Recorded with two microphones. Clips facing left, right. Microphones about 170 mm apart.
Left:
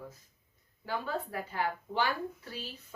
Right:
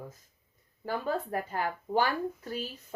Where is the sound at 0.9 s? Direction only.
45° right (ahead or behind).